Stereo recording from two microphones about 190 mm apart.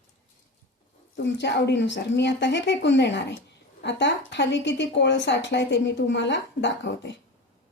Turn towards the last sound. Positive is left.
turn(degrees=65)  # may be behind; listen again after turning